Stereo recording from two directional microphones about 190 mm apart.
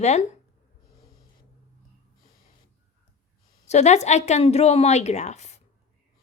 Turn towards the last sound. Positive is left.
turn(degrees=35)  # may be behind; listen again after turning